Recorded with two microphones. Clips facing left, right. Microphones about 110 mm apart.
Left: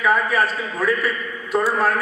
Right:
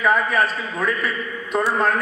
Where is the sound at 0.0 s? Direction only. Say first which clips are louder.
Even; centre (ahead or behind).